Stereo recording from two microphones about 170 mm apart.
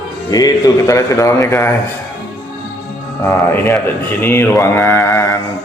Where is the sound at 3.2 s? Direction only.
15° left (ahead or behind).